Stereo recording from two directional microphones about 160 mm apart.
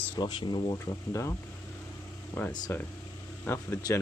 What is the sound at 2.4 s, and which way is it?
Speech, 15° left (ahead or behind).